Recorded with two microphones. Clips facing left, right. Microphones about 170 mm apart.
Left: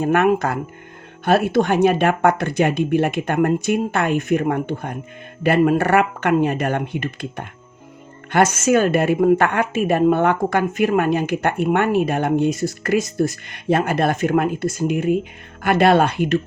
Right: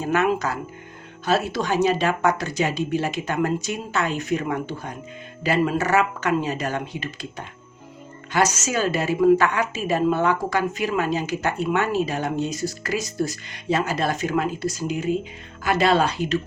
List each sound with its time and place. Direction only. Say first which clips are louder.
0.0 s a woman's voice: left 5 dB; 55° left (ahead or behind)